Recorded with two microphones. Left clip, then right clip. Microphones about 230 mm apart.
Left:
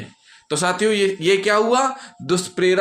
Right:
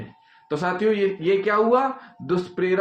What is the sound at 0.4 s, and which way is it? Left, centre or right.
Speech, left.